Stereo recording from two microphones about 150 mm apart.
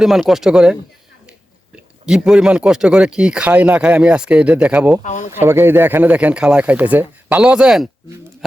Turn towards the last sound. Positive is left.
turn(degrees=-5)  # may be behind; listen again after turning